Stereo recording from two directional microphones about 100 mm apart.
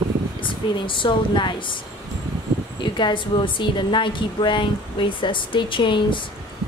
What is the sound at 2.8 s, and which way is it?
A woman's voice, 50° left (ahead or behind).